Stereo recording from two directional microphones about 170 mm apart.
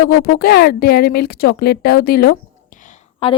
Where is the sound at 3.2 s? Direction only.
35° left (ahead or behind).